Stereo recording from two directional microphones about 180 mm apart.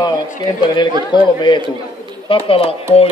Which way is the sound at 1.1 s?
25° left (ahead or behind).